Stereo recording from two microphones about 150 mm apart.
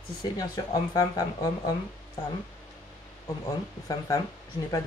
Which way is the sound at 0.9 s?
25° left (ahead or behind).